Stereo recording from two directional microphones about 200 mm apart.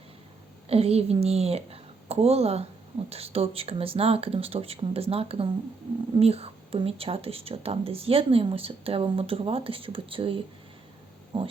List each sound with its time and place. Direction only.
0.7 s a woman's voice: 30° right (ahead or behind)
11.3 s speech: 25° right (ahead or behind)